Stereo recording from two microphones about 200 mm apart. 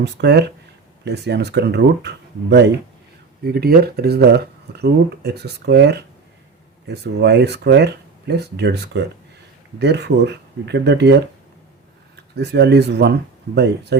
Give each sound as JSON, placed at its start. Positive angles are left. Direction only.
{"t": 0.0, "sound": "speech", "side_deg": -55}
{"t": 12.4, "sound": "speech", "side_deg": -55}